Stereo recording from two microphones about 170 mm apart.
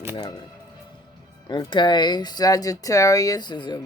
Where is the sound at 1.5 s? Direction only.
25° left (ahead or behind).